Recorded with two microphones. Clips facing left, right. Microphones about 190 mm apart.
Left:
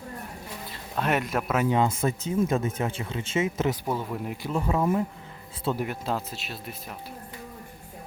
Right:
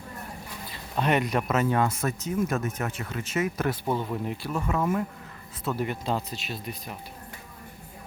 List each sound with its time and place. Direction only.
0.7 s speech: centre (ahead or behind); by 3.8 s 25° left (ahead or behind)
3.8 s speech: 5° left (ahead or behind)
4.4 s speech: 25° left (ahead or behind)
5.8 s speech: 5° left (ahead or behind)